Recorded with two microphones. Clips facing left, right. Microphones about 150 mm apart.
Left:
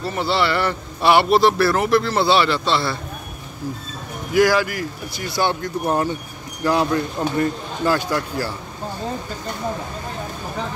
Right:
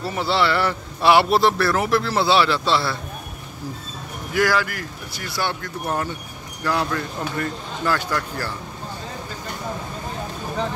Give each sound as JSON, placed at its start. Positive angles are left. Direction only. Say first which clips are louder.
{"t": 0.0, "sound": "speech", "louder": "left 1 dB", "side_deg": -5}
{"t": 4.3, "sound": "speech", "louder": "left 4 dB", "side_deg": 15}